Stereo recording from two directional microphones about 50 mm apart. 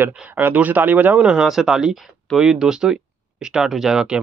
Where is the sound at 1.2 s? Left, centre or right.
Centre.